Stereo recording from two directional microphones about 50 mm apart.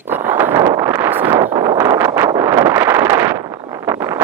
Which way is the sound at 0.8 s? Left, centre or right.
Right.